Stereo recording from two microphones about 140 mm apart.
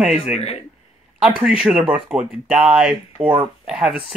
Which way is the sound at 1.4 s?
5° right (ahead or behind).